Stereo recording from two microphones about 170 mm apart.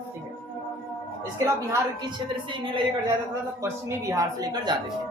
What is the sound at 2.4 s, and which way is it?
Speech, 30° right (ahead or behind).